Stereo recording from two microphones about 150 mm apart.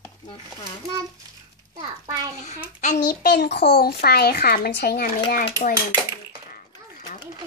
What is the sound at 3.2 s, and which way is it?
A child's voice, 90° left.